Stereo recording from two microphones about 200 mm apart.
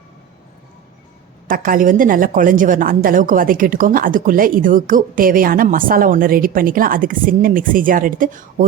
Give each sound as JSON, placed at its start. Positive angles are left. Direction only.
{"t": 1.5, "sound": "a woman's voice", "side_deg": -45}